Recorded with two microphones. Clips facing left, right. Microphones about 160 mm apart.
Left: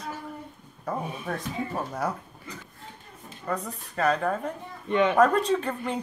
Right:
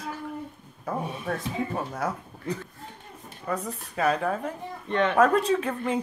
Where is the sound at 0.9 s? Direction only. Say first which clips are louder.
Right 1 dB; centre (ahead or behind).